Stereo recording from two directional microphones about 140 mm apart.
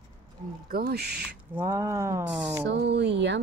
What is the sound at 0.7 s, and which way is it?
Speech, 90° right.